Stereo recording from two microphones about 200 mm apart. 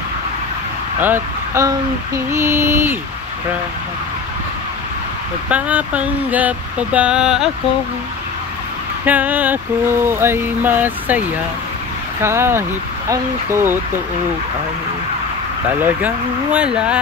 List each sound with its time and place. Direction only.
0.9 s speech: 10° right (ahead or behind)
5.5 s speech: 5° right (ahead or behind)
9.0 s speech: 10° right (ahead or behind)
16.5 s speech: 5° right (ahead or behind)